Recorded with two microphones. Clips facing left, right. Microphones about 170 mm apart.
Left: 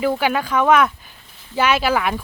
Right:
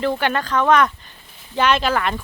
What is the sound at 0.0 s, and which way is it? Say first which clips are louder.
Speech: left 1 dB; 10° left (ahead or behind).